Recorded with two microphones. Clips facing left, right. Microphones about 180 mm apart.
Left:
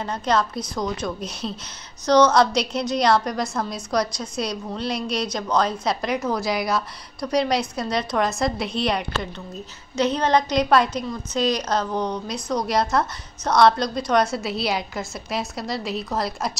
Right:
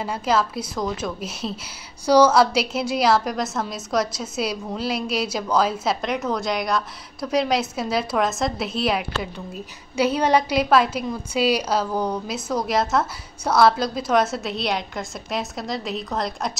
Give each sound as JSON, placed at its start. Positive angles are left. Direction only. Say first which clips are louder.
{"t": 0.0, "sound": "a woman's voice", "louder": "even", "side_deg": -5}